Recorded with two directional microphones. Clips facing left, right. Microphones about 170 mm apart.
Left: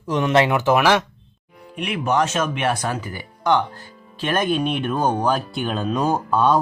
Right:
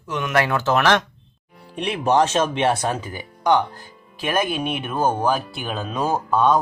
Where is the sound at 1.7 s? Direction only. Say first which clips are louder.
Right 2 dB; 30° right (ahead or behind).